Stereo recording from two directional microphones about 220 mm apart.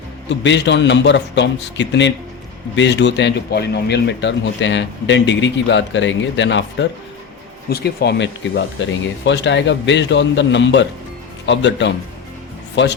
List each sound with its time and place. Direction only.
0.3 s a man's voice: 55° left (ahead or behind)